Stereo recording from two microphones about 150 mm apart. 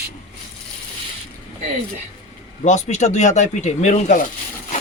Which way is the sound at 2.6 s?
50° left (ahead or behind).